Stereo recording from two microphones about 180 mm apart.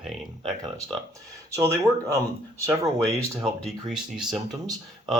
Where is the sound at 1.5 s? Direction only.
15° right (ahead or behind).